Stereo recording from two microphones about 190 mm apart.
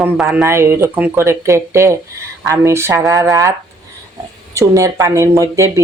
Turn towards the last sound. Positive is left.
turn(degrees=-15)  # may be behind; listen again after turning